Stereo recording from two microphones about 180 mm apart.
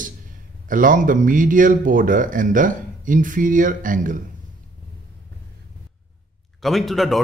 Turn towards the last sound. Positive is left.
turn(degrees=0)  # may be behind; listen again after turning